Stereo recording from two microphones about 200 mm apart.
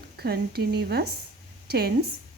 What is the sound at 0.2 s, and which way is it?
Speech, 50° right (ahead or behind).